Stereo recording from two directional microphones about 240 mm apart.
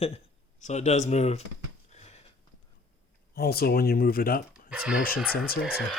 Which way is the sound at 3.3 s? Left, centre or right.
Left.